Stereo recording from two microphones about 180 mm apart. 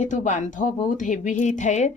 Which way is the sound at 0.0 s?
45° left (ahead or behind).